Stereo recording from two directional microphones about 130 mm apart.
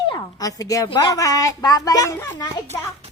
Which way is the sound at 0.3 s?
30° left (ahead or behind).